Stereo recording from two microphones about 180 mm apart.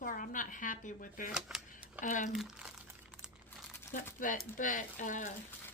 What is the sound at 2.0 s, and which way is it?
Speech, 45° left (ahead or behind).